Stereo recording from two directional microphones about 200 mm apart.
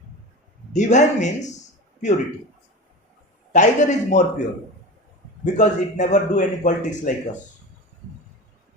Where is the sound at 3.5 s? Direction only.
40° left (ahead or behind).